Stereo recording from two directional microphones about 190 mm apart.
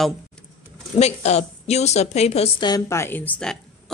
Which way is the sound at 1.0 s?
35° left (ahead or behind).